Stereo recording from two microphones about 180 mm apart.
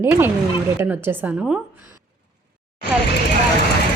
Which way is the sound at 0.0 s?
10° right (ahead or behind).